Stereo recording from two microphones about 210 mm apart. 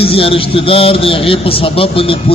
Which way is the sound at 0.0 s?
25° left (ahead or behind).